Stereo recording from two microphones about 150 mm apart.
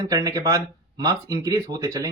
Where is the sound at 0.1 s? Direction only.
20° right (ahead or behind).